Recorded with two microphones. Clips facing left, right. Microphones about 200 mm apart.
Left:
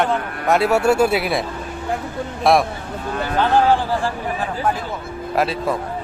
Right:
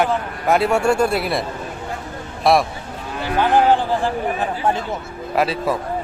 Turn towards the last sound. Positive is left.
turn(degrees=0)  # may be behind; listen again after turning